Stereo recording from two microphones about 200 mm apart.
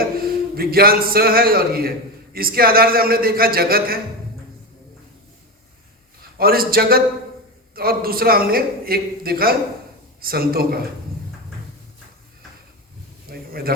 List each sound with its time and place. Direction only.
0.2 s a man's voice: 50° right (ahead or behind)
6.3 s a man's voice: 50° right (ahead or behind)
13.2 s a sound: 50° right (ahead or behind)